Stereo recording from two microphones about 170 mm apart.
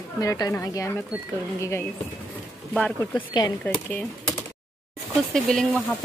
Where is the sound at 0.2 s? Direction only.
20° left (ahead or behind).